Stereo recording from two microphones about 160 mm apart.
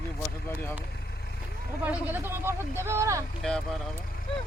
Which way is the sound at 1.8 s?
10° right (ahead or behind).